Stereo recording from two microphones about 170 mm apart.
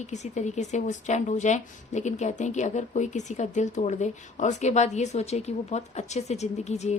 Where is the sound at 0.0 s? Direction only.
45° left (ahead or behind).